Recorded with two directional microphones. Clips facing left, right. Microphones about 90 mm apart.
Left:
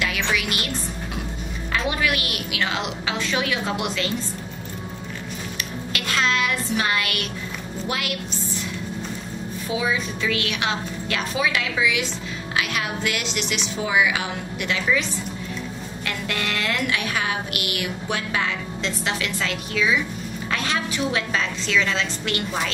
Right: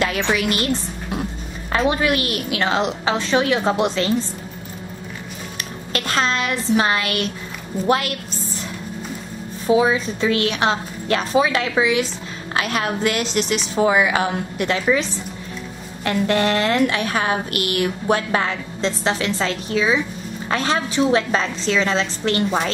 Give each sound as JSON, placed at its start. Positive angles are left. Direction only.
{"t": 0.0, "sound": "a woman's voice", "side_deg": -40}
{"t": 1.7, "sound": "a woman's voice", "side_deg": -35}
{"t": 5.6, "sound": "a woman's voice", "side_deg": -40}
{"t": 9.7, "sound": "a woman's voice", "side_deg": -35}